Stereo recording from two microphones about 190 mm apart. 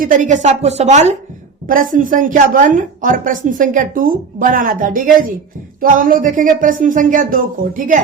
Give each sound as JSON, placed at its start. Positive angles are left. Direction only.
{"t": 0.0, "sound": "a woman's voice", "side_deg": -40}